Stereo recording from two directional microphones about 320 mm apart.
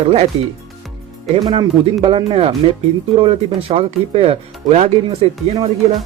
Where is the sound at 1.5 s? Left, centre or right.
Centre.